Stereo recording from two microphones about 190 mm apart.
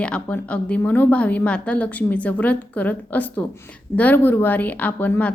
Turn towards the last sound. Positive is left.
turn(degrees=10)  # may be behind; listen again after turning